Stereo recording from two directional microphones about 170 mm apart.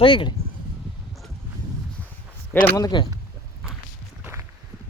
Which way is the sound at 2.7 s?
25° left (ahead or behind).